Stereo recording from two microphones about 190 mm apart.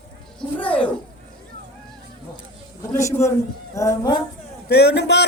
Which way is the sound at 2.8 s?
15° left (ahead or behind).